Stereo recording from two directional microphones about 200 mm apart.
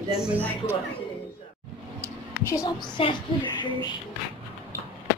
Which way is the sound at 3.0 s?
25° left (ahead or behind).